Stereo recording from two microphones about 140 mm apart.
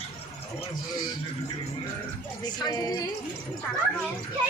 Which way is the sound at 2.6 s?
25° left (ahead or behind).